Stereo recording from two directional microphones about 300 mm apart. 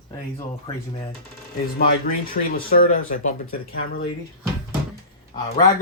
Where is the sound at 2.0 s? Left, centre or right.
Left.